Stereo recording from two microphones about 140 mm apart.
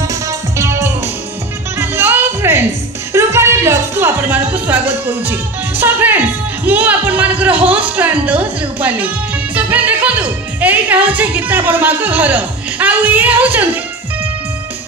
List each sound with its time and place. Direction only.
0.0 s music: 25° right (ahead or behind)
7.9 s a woman's voice: 10° right (ahead or behind)